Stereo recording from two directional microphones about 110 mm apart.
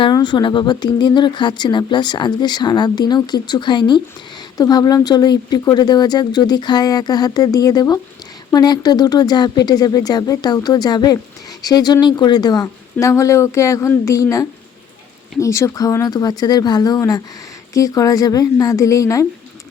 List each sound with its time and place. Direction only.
0.0 s speech: 45° left (ahead or behind)